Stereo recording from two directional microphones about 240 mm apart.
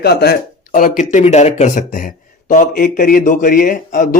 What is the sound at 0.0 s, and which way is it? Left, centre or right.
A man's voice, left.